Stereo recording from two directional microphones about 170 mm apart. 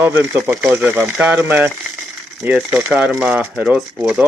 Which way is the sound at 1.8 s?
Centre (ahead or behind).